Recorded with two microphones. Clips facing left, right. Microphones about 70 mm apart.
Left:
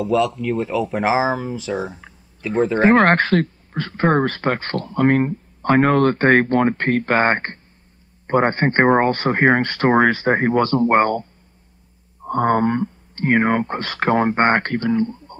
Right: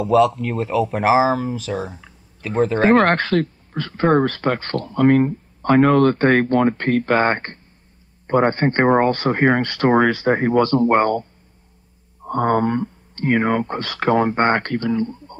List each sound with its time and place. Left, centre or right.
0.0 s speech: centre
0.4 s speech: centre
0.9 s speech: centre
2.1 s a sound: left
2.7 s speech: centre
3.1 s speech: left
12.3 s speech: left